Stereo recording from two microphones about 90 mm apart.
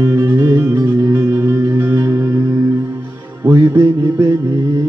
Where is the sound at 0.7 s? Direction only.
35° right (ahead or behind).